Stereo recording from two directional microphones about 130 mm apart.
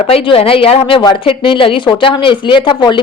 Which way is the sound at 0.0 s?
50° left (ahead or behind).